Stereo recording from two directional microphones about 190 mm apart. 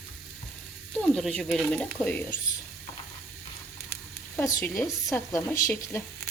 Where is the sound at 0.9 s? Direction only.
Centre (ahead or behind).